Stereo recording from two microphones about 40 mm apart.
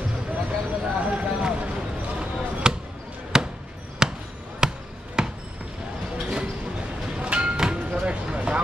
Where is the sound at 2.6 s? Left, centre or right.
Centre.